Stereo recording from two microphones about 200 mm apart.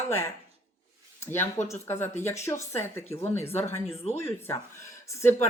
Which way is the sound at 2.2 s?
35° left (ahead or behind).